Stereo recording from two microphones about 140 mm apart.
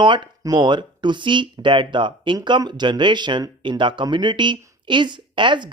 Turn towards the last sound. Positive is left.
turn(degrees=-35)  # may be behind; listen again after turning